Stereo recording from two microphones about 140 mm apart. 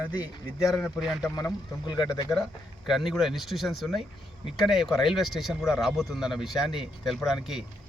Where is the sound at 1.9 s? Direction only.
30° left (ahead or behind).